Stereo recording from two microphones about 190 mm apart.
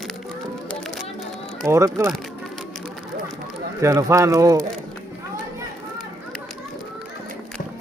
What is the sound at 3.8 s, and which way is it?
Speech, 15° right (ahead or behind).